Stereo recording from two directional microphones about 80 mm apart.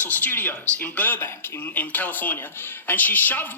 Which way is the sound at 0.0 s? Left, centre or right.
Left.